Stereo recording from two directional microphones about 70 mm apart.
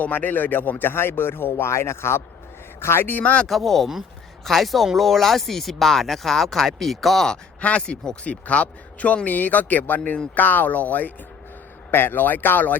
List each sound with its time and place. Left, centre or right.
0.0 s speech: left
3.4 s speech: centre
7.6 s speech: centre